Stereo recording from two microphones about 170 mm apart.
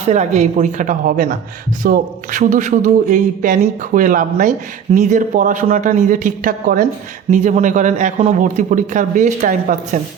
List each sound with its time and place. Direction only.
0.0 s a man's voice: 40° right (ahead or behind)